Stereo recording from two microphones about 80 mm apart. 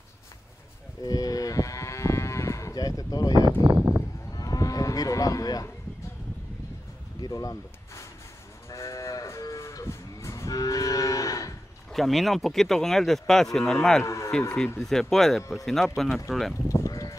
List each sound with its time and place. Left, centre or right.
1.0 s moo: left
3.7 s sheep: centre
4.3 s a sound: left
7.2 s speech: left
8.6 s moo: left
11.9 s speech: centre
14.0 s a man's voice: left
14.8 s speech: centre
16.6 s sheep: left